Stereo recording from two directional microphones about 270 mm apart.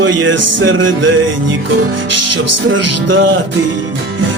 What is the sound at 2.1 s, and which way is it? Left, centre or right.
Music, right.